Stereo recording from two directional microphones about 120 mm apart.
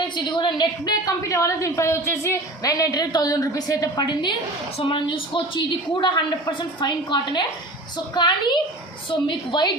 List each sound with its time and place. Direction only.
0.2 s a woman's voice: 40° left (ahead or behind)